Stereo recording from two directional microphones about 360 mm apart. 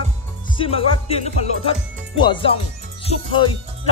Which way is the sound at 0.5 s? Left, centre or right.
Centre.